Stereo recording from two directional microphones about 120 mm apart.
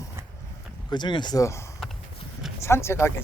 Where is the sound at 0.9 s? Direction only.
40° left (ahead or behind).